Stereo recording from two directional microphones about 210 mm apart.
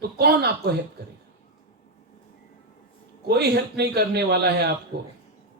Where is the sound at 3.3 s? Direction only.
50° right (ahead or behind).